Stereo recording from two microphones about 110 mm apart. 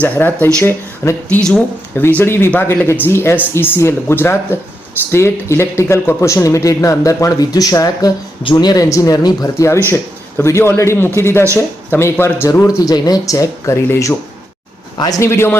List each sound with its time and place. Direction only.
0.0 s speech: 20° left (ahead or behind)
1.4 s speech: 5° left (ahead or behind)
2.0 s speech: 20° left (ahead or behind)
14.9 s speech: 35° left (ahead or behind)